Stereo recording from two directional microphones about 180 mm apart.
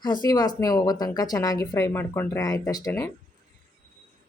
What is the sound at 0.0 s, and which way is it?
Speech, 25° left (ahead or behind).